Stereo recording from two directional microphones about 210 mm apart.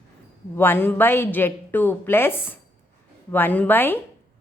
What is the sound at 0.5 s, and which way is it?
Speech, 10° left (ahead or behind).